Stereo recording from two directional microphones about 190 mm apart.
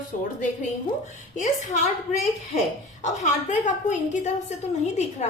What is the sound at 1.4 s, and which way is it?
A woman's voice, 40° left (ahead or behind).